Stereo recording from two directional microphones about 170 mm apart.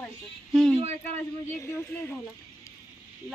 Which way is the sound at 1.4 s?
15° left (ahead or behind).